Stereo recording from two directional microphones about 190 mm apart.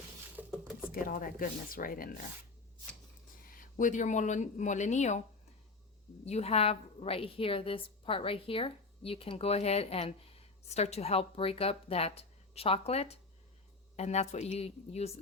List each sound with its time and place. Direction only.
0.3 s a sound: 10° right (ahead or behind)
0.9 s speech: 50° left (ahead or behind)
3.8 s a woman's voice: 40° left (ahead or behind)
6.2 s a woman's voice: 35° left (ahead or behind)